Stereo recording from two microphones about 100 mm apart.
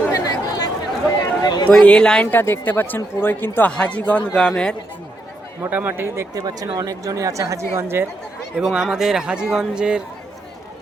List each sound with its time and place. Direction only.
0.1 s chatter: 40° left (ahead or behind)
1.2 s a sound: 45° left (ahead or behind)
1.7 s speech: 10° left (ahead or behind)
2.2 s speech: 20° left (ahead or behind)
5.7 s speech: 20° right (ahead or behind)
6.3 s speech: 40° right (ahead or behind)
8.6 s a man's voice: 5° right (ahead or behind)